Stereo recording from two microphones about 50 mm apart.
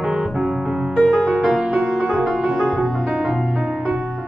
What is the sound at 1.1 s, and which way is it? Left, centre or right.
Music, centre.